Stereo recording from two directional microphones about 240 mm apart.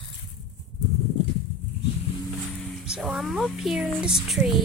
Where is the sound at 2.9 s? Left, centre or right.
Centre.